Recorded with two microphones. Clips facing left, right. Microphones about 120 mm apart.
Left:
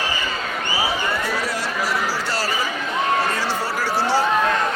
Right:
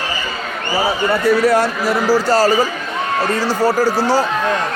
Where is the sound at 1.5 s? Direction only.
55° right (ahead or behind).